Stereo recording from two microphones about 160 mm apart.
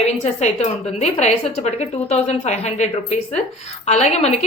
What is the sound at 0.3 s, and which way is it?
A woman's voice, 45° left (ahead or behind).